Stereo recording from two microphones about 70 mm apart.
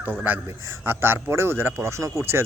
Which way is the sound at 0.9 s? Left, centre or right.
Right.